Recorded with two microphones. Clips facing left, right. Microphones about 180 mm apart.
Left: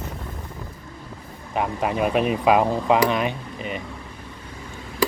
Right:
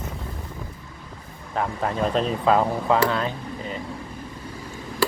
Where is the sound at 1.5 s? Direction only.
15° left (ahead or behind).